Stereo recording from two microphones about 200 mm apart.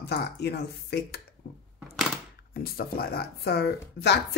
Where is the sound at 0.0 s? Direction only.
55° left (ahead or behind).